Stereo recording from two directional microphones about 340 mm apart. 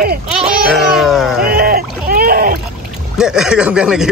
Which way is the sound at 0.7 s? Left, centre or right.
Centre.